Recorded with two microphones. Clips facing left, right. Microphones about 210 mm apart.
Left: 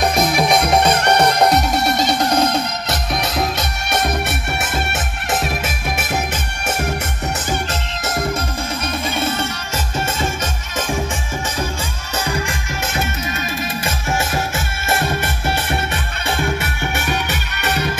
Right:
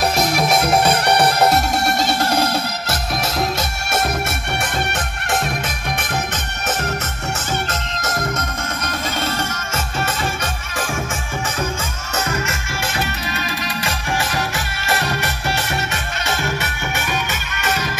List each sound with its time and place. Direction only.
0.0 s music: centre (ahead or behind)
8.0 s music: 30° left (ahead or behind)
12.3 s music: 15° left (ahead or behind)